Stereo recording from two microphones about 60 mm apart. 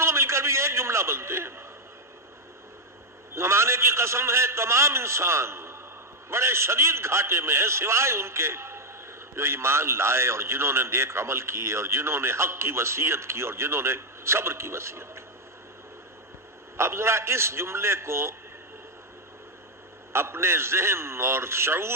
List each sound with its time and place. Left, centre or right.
0.0 s a sound: right
3.3 s a man's voice: right
16.7 s a man's voice: right
20.1 s a man's voice: right